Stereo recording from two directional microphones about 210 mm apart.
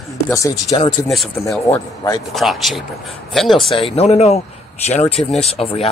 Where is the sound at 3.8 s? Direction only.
30° left (ahead or behind).